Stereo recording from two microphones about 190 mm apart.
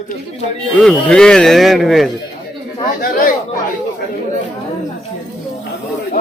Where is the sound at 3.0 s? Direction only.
50° left (ahead or behind).